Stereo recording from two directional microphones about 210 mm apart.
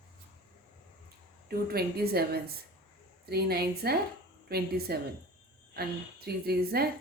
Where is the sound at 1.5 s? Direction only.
50° right (ahead or behind).